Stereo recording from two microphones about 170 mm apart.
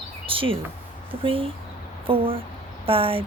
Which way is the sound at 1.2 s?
30° right (ahead or behind).